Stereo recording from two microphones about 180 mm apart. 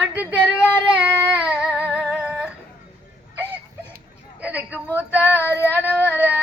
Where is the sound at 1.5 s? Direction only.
5° right (ahead or behind).